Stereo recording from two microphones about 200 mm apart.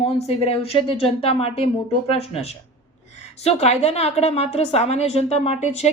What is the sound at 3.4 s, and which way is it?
A woman's voice, 30° left (ahead or behind).